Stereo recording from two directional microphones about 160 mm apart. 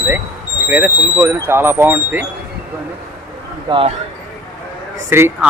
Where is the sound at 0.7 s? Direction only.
10° right (ahead or behind).